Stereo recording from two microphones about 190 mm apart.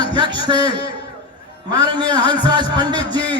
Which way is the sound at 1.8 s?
25° right (ahead or behind).